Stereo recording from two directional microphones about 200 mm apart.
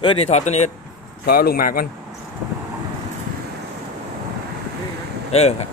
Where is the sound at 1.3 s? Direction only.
50° left (ahead or behind).